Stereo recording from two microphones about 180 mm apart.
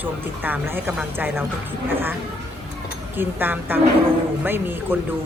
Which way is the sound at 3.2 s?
10° right (ahead or behind).